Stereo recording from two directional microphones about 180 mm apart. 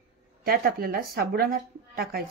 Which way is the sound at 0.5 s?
55° right (ahead or behind).